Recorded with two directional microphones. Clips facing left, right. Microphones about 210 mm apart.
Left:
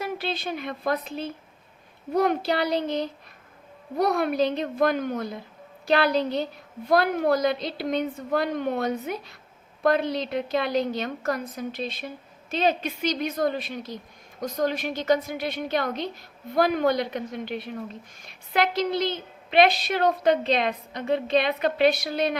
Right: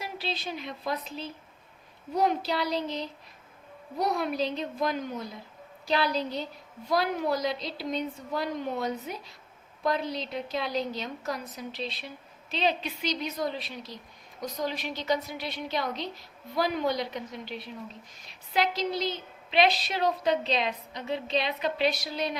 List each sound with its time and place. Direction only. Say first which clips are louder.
0.0 s a woman's voice: left 5 dB; 55° left (ahead or behind)